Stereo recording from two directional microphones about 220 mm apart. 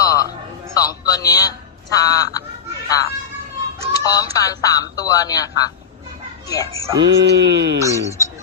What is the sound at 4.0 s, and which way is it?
Speech, 15° left (ahead or behind).